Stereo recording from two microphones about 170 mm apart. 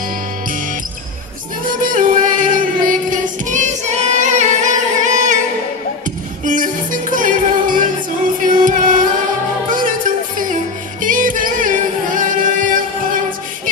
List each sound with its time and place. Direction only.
1.8 s music: 50° right (ahead or behind)
6.4 s music: 50° right (ahead or behind)